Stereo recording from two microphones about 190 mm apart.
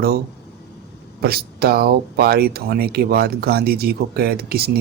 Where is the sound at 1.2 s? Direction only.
55° right (ahead or behind).